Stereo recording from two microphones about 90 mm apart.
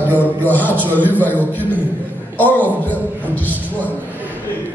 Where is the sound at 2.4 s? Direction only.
20° left (ahead or behind).